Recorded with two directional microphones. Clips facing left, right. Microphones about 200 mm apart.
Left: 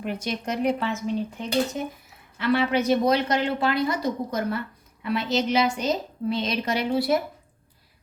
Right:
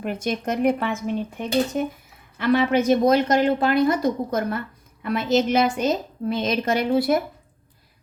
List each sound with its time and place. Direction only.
0.0 s a woman's voice: 50° right (ahead or behind)